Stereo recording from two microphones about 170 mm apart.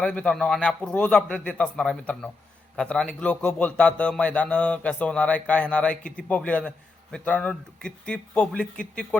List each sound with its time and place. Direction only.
0.0 s a man's voice: 5° left (ahead or behind)